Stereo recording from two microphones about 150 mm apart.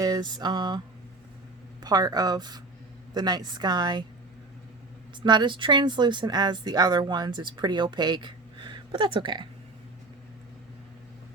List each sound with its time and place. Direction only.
0.0 s a sound: 25° right (ahead or behind)
1.8 s a woman's voice: 25° right (ahead or behind)
5.2 s speech: 30° right (ahead or behind)